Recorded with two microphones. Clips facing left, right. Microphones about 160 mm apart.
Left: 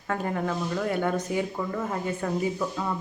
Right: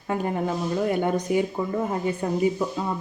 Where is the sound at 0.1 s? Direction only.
20° right (ahead or behind).